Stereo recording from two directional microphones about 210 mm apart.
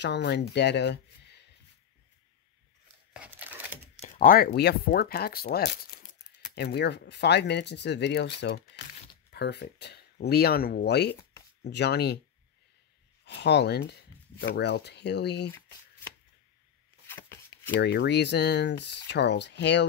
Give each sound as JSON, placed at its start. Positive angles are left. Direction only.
{"t": 0.0, "sound": "speech", "side_deg": 55}
{"t": 3.1, "sound": "crumpling", "side_deg": -5}
{"t": 4.0, "sound": "speech", "side_deg": 40}
{"t": 13.2, "sound": "speech", "side_deg": 55}
{"t": 17.1, "sound": "a sound", "side_deg": 10}
{"t": 17.7, "sound": "speech", "side_deg": 55}